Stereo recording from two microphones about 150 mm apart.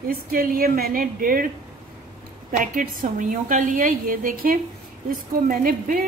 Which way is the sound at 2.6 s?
65° right (ahead or behind).